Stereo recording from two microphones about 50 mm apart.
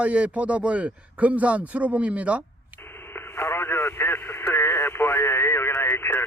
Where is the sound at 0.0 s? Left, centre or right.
Right.